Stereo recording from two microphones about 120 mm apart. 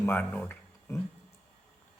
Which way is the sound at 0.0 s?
15° left (ahead or behind).